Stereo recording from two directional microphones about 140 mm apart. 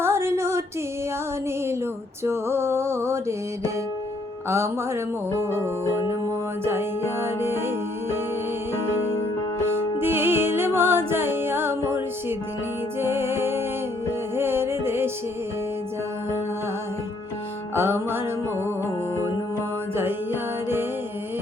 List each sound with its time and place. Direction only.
0.0 s female singing: 20° right (ahead or behind)
2.2 s music: 15° right (ahead or behind)
4.4 s music: 20° right (ahead or behind)
6.7 s music: 15° right (ahead or behind)
10.0 s music: 15° right (ahead or behind)
17.7 s music: 15° right (ahead or behind)
20.0 s music: 15° right (ahead or behind)